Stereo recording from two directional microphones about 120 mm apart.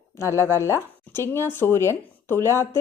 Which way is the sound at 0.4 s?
20° left (ahead or behind).